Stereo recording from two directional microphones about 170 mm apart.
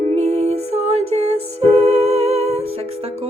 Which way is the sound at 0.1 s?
40° right (ahead or behind).